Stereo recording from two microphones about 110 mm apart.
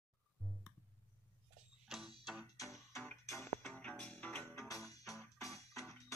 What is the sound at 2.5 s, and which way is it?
Music, 30° left (ahead or behind).